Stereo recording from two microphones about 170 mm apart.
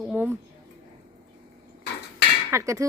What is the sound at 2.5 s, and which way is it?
Speech, 20° right (ahead or behind).